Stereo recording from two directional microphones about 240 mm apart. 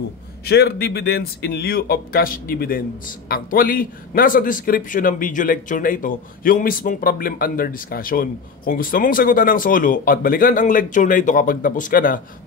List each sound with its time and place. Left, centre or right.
0.5 s a man's voice: left